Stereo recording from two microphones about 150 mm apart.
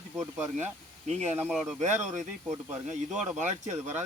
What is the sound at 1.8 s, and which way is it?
Speech, 55° right (ahead or behind).